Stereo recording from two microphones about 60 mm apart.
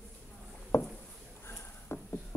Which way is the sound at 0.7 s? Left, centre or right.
Left.